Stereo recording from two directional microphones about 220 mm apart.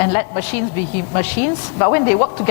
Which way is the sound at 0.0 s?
15° left (ahead or behind).